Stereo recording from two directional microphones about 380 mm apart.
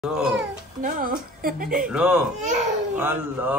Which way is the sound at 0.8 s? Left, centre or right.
Right.